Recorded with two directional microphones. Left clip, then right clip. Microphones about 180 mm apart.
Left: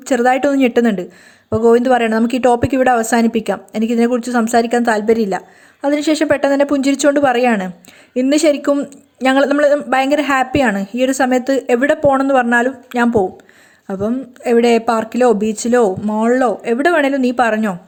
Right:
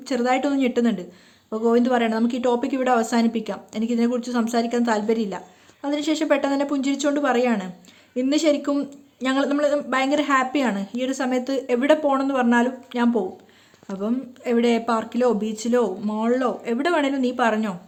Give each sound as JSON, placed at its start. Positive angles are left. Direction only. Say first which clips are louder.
{"t": 0.0, "sound": "speech", "louder": "left 9 dB", "side_deg": 30}